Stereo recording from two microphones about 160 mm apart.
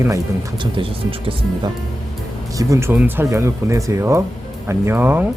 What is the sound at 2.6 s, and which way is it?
Speech, 20° right (ahead or behind).